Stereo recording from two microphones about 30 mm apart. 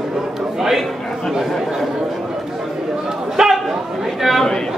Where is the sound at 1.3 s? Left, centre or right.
Centre.